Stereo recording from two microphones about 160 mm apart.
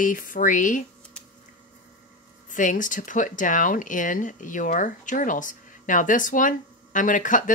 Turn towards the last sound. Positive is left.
turn(degrees=55)  # may be behind; listen again after turning